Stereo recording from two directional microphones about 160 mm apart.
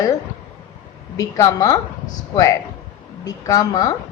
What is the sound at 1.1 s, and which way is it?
A woman's voice, 20° left (ahead or behind).